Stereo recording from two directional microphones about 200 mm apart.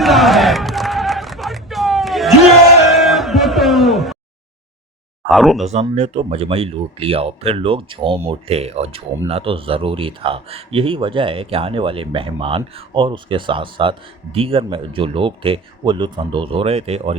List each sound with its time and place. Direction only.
0.0 s a sound: centre (ahead or behind)
5.3 s speech: centre (ahead or behind)
5.6 s speech: 35° right (ahead or behind)